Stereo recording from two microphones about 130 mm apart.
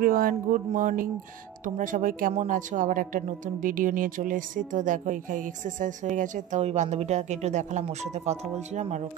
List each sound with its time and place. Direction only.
0.0 s speech: 90° right; by 9.0 s 60° right (ahead or behind)